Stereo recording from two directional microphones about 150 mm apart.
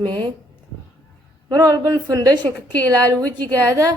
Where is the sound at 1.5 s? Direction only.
25° right (ahead or behind).